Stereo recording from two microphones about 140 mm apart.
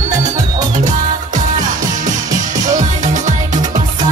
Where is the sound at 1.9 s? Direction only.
60° right (ahead or behind).